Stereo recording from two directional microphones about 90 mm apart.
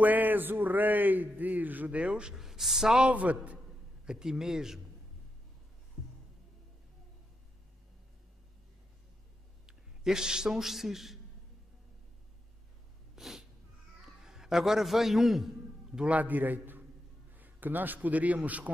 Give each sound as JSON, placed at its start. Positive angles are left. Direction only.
{"t": 0.0, "sound": "a man's voice", "side_deg": -20}
{"t": 9.7, "sound": "a man's voice", "side_deg": -5}
{"t": 13.1, "sound": "cat", "side_deg": -5}
{"t": 14.0, "sound": "a man's voice", "side_deg": -5}